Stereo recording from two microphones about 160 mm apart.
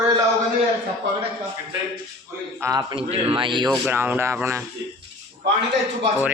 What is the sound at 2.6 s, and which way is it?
Speech, 20° right (ahead or behind).